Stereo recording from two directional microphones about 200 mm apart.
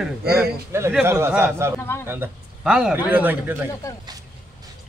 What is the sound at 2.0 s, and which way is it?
A man's voice, 10° right (ahead or behind).